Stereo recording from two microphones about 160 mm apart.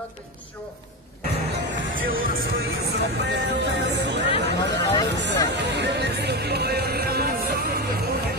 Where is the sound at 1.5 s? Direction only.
65° right (ahead or behind).